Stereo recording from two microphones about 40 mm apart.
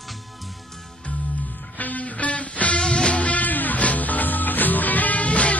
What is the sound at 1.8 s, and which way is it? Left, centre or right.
Music, left.